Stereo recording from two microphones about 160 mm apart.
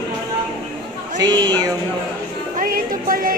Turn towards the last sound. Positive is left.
turn(degrees=-60)  # may be behind; listen again after turning